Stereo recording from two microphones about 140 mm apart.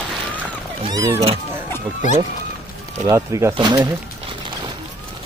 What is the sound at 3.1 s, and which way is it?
Speech, 20° right (ahead or behind).